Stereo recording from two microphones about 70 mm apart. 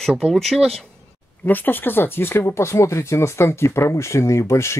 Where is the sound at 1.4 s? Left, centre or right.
Left.